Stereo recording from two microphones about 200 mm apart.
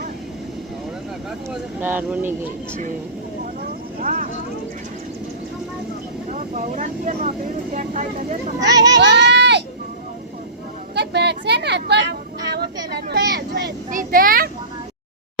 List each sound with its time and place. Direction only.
1.8 s speech: 10° right (ahead or behind)
4.0 s vehicle: 40° right (ahead or behind)
6.3 s speech: 35° right (ahead or behind)
9.0 s speech: 60° right (ahead or behind)
10.9 s a sound: 55° right (ahead or behind)
13.1 s vehicle: 55° right (ahead or behind)
13.9 s a child's voice: 45° right (ahead or behind)